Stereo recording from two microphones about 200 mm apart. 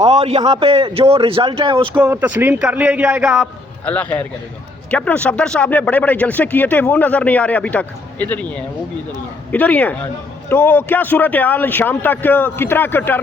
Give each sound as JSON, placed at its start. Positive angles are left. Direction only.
{"t": 0.0, "sound": "a man's voice", "side_deg": -20}
{"t": 2.0, "sound": "speech", "side_deg": -10}
{"t": 3.3, "sound": "a man's voice", "side_deg": 5}